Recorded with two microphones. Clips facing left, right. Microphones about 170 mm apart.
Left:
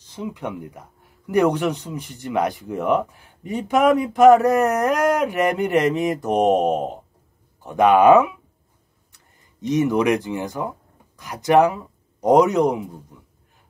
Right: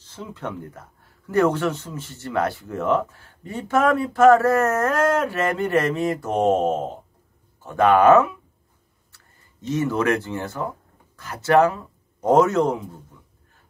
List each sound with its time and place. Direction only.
0.0 s speech: 15° left (ahead or behind)